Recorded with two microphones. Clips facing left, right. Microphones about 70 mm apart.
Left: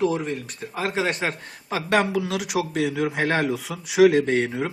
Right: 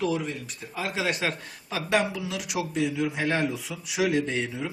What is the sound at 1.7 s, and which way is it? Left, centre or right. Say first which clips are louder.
A man's voice: left 4 dB; left.